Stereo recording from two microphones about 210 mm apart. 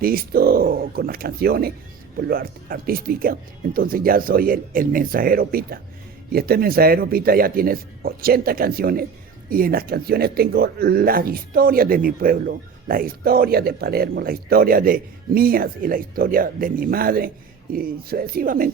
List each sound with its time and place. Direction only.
0.0 s speech: 45° right (ahead or behind)